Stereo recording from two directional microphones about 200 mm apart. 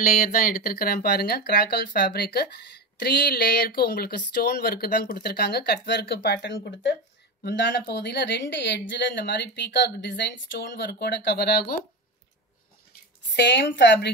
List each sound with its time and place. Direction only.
0.0 s speech: 45° left (ahead or behind)
13.4 s speech: 60° left (ahead or behind)